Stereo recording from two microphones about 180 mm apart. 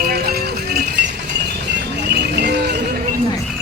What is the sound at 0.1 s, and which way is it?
Music, 60° right (ahead or behind).